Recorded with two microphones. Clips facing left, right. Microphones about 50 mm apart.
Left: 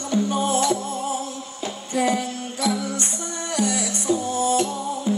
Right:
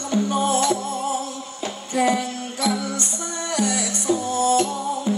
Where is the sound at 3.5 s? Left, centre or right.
Right.